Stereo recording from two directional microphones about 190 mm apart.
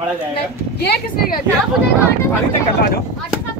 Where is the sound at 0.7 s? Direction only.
60° left (ahead or behind).